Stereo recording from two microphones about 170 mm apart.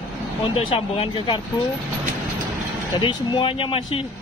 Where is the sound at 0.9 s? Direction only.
30° left (ahead or behind).